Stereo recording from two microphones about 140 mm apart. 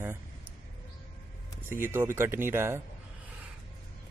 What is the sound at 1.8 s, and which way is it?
Speech, 15° right (ahead or behind).